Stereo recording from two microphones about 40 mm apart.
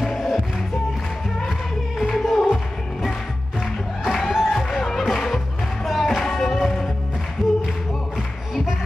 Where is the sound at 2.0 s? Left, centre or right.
Centre.